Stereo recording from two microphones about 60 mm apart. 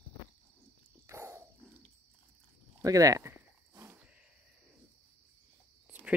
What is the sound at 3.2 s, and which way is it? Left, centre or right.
Cricket, right.